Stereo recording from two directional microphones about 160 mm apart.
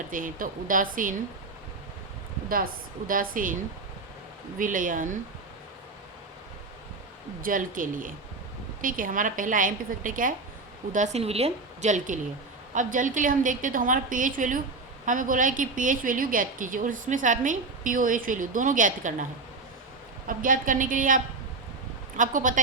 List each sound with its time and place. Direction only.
0.1 s a woman's voice: 55° right (ahead or behind)
3.1 s a woman's voice: 60° right (ahead or behind)
4.5 s a woman's voice: 55° right (ahead or behind)
7.4 s a woman's voice: 60° right (ahead or behind)
10.9 s a woman's voice: 45° right (ahead or behind)
20.2 s a woman's voice: 55° right (ahead or behind)
22.2 s a woman's voice: 55° right (ahead or behind)